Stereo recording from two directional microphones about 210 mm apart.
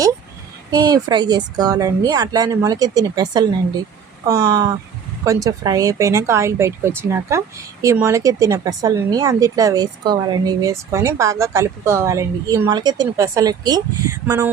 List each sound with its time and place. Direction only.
0.7 s speech: 20° right (ahead or behind)